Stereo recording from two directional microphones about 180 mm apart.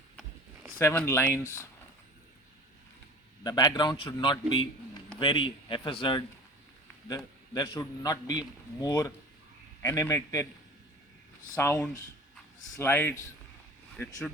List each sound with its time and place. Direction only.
0.8 s speech: 15° left (ahead or behind)
3.4 s a man's voice: 20° left (ahead or behind)
7.5 s a man's voice: 25° left (ahead or behind)
11.5 s speech: 15° left (ahead or behind)